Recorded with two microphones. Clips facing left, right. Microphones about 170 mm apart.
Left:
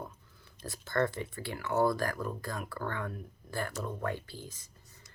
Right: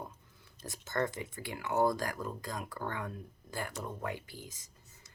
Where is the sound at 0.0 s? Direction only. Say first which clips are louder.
Left 2 dB; 20° right (ahead or behind).